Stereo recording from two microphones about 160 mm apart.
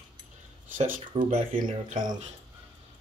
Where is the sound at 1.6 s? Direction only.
55° right (ahead or behind).